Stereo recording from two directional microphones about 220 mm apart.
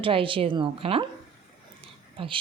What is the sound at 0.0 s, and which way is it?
A woman's voice, 25° right (ahead or behind).